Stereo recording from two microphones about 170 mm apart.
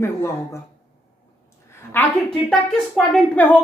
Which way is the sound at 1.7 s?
10° left (ahead or behind).